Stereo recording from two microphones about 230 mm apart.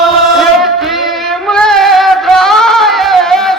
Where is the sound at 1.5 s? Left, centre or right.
Centre.